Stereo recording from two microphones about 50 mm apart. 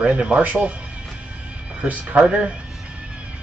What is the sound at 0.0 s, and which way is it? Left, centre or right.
Speech, right.